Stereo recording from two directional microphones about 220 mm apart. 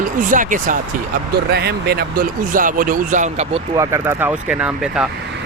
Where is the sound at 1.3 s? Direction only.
50° right (ahead or behind); by 3.6 s 30° right (ahead or behind).